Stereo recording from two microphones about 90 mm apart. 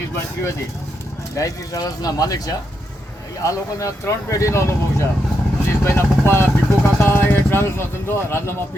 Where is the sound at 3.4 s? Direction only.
35° left (ahead or behind).